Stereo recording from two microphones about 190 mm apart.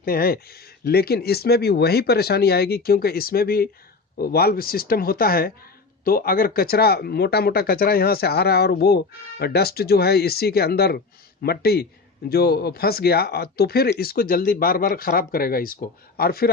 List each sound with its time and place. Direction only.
0.0 s speech: 50° left (ahead or behind)